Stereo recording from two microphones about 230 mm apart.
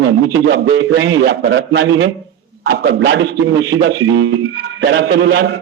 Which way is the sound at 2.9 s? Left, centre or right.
Right.